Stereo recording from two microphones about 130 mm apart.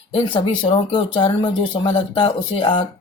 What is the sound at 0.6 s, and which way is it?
Speech, 50° left (ahead or behind).